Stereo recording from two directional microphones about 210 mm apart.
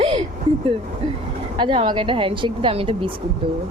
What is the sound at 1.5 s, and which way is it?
A woman's voice, 25° right (ahead or behind).